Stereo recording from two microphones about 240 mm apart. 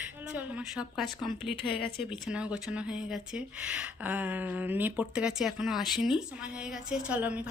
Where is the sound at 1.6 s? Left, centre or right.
Left.